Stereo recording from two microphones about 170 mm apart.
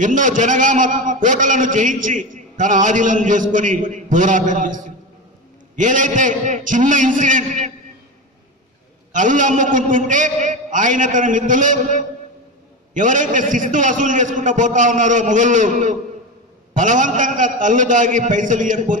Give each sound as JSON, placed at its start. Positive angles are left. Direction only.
{"t": 0.0, "sound": "a man's voice", "side_deg": -50}
{"t": 9.1, "sound": "a man's voice", "side_deg": -50}